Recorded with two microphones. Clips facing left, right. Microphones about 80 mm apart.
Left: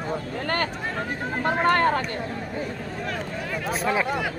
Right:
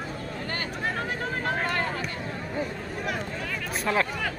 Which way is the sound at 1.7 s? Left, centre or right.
Left.